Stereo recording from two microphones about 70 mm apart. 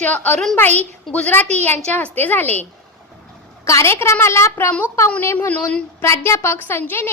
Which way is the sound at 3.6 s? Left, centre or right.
Left.